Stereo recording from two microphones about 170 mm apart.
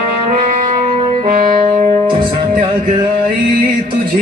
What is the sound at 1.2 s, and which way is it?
Music, 55° right (ahead or behind).